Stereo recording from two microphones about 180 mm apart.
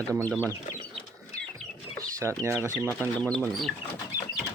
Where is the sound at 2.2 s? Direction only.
15° right (ahead or behind).